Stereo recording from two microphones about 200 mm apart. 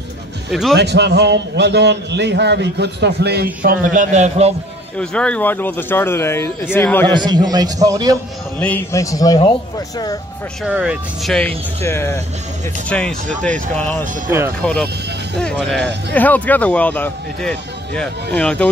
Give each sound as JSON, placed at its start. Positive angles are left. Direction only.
{"t": 0.5, "sound": "speech", "side_deg": 0}
{"t": 0.7, "sound": "a man's voice", "side_deg": -60}
{"t": 3.6, "sound": "a man's voice", "side_deg": -40}
{"t": 4.9, "sound": "speech", "side_deg": 5}
{"t": 7.2, "sound": "a man's voice", "side_deg": -20}
{"t": 8.5, "sound": "speech", "side_deg": 10}
{"t": 10.6, "sound": "speech", "side_deg": -5}